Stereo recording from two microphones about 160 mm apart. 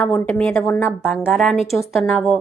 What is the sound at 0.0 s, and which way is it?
Speech, 10° left (ahead or behind).